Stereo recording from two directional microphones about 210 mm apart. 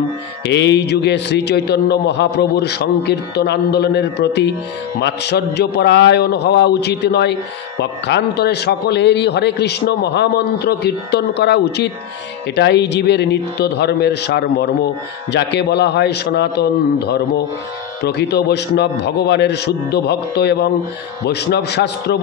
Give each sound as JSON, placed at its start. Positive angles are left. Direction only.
{"t": 0.5, "sound": "a man's voice", "side_deg": 55}